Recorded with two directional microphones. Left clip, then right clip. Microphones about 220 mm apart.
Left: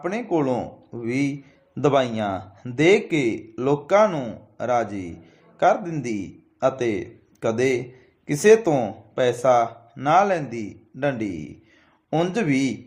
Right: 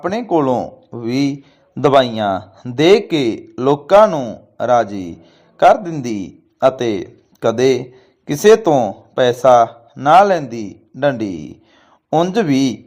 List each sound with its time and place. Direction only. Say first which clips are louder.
0.0 s speech: right 7 dB; 20° right (ahead or behind)